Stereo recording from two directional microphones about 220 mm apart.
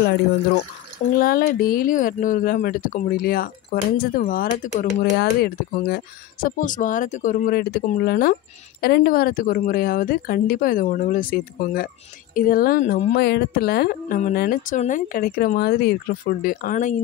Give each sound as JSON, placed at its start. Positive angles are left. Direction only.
{"t": 1.1, "sound": "a woman's voice", "side_deg": 40}